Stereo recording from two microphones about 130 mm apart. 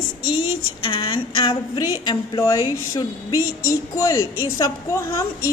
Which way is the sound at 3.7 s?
25° left (ahead or behind).